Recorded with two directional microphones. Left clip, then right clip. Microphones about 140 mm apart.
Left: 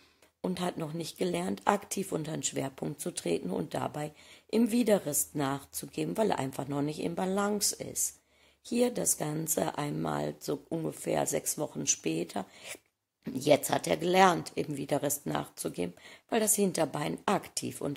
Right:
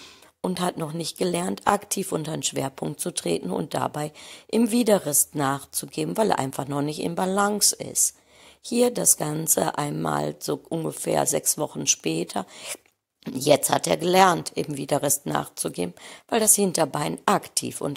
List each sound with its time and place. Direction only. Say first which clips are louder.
0.4 s speech: right 7 dB; 30° right (ahead or behind)